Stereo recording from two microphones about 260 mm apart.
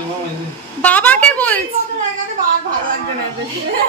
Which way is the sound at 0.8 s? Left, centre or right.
Centre.